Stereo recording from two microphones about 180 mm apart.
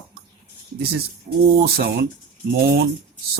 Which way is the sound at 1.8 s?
55° right (ahead or behind).